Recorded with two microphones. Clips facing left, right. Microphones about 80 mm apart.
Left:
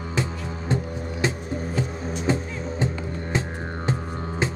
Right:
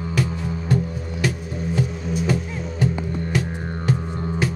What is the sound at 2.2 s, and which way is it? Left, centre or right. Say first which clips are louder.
Music: right 1 dB; left.